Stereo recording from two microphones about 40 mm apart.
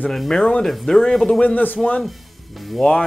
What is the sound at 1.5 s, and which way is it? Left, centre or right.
Speech, left.